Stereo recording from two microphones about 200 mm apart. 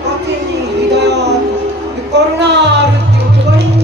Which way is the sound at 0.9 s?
55° right (ahead or behind).